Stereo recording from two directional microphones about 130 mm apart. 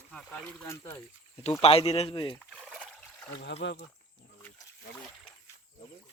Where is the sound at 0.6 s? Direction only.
20° left (ahead or behind).